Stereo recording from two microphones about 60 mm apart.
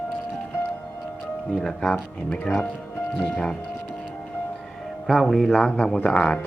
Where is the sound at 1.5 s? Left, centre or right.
Centre.